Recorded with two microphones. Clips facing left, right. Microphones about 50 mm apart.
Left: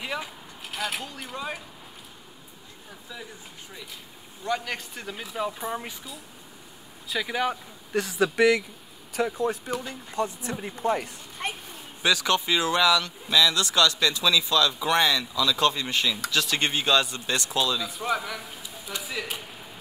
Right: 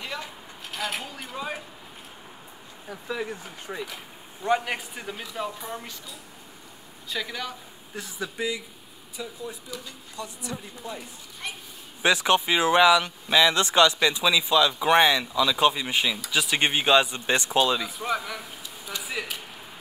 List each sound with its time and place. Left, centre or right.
0.0 s a sound: centre
0.7 s speech: centre
3.1 s speech: right
4.4 s speech: right
4.6 s a man's voice: centre
5.6 s speech: centre
7.1 s speech: centre
7.9 s speech: left
9.7 s speech: left
12.0 s speech: right
17.8 s a man's voice: centre